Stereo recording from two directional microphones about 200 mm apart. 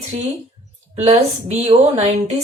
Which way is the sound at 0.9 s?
30° right (ahead or behind).